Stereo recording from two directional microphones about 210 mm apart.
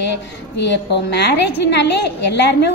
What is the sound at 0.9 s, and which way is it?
A woman's voice, 55° left (ahead or behind).